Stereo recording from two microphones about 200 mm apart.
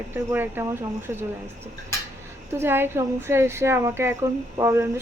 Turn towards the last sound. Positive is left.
turn(degrees=-15)  # may be behind; listen again after turning